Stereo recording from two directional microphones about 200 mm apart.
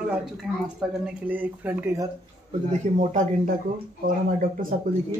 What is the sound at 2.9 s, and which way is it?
Speech, 35° right (ahead or behind).